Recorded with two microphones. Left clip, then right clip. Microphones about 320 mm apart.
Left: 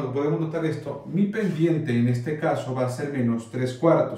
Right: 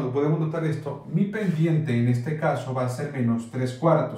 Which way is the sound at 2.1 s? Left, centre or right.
Centre.